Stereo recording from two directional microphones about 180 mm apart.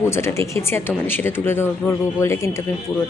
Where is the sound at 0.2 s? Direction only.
15° left (ahead or behind).